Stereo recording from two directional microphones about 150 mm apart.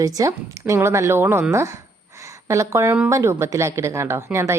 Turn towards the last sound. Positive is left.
turn(degrees=-20)  # may be behind; listen again after turning